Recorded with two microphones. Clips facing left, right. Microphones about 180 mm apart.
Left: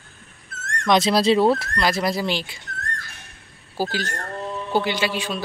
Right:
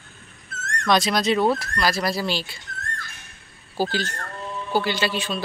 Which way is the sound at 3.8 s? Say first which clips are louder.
Right 1 dB; 10° left (ahead or behind).